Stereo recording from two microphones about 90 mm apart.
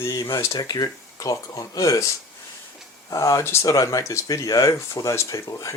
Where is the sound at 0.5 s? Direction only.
50° left (ahead or behind).